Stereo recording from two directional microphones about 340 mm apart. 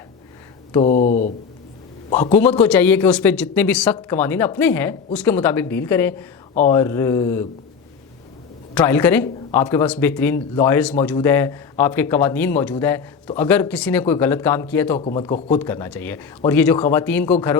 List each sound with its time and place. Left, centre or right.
0.7 s speech: centre
2.3 s speech: centre
8.7 s speech: centre